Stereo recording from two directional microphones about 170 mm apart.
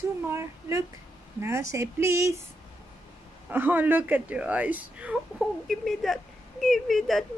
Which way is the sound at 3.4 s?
10° right (ahead or behind).